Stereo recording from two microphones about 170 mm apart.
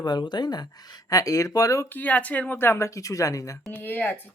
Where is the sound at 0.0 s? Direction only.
25° left (ahead or behind).